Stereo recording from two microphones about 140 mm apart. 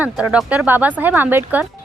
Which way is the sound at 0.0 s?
10° right (ahead or behind).